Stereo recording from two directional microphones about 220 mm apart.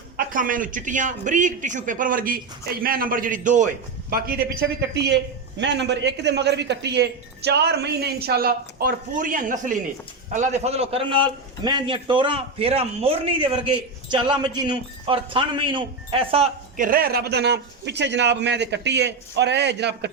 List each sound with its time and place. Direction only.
0.2 s speech: 40° right (ahead or behind)
5.0 s a man's voice: 50° right (ahead or behind); by 16.5 s 25° right (ahead or behind)
16.7 s a man's voice: 40° right (ahead or behind)